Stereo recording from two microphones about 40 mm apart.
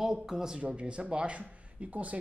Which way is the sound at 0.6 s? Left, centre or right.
Right.